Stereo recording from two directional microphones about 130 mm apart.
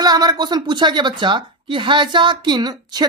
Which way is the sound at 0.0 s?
30° right (ahead or behind).